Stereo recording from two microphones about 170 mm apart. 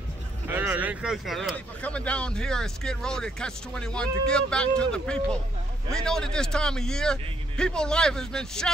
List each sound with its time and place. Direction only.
0.5 s speech: 10° right (ahead or behind)